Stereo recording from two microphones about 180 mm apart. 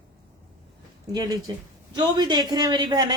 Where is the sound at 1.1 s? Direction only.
20° right (ahead or behind).